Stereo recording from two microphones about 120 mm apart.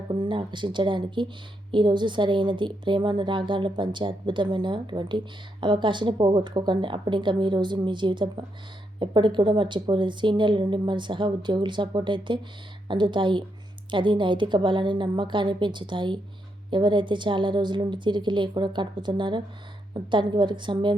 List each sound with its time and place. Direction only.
0.1 s a woman's voice: 40° right (ahead or behind)